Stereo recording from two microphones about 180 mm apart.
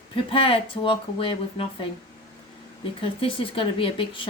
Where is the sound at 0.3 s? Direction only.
30° left (ahead or behind).